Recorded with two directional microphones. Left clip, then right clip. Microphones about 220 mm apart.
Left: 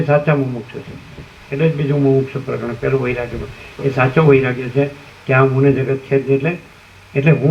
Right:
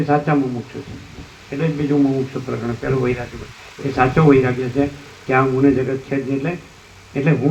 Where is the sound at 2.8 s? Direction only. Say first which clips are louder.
Left 3 dB; 50° left (ahead or behind).